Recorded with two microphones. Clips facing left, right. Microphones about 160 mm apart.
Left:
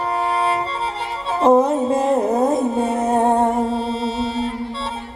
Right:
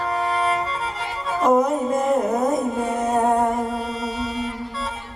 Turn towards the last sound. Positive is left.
turn(degrees=30)  # may be behind; listen again after turning